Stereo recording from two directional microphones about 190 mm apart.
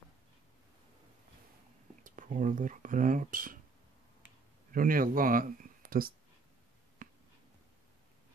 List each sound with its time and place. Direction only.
2.0 s speech: 40° right (ahead or behind)
4.7 s speech: 45° right (ahead or behind)
7.0 s a sound: 45° right (ahead or behind)